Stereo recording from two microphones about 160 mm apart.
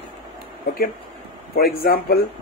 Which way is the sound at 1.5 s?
75° left (ahead or behind).